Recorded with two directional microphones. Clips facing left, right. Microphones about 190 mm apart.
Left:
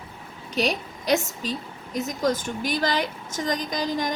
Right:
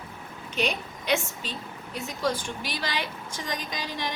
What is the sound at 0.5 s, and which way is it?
A woman's voice, 35° left (ahead or behind).